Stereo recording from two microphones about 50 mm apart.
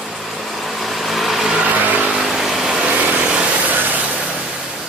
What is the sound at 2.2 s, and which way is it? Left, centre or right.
Vehicle, centre.